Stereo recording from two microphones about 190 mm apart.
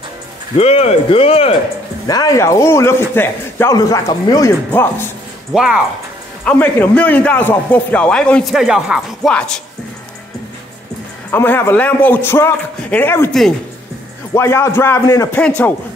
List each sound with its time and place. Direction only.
0.6 s speech: 35° left (ahead or behind)
2.0 s a man's voice: 20° left (ahead or behind)
5.5 s speech: 5° right (ahead or behind)
6.4 s a man's voice: 10° left (ahead or behind)
11.3 s a man's voice: 10° left (ahead or behind)
14.3 s a man's voice: 15° left (ahead or behind)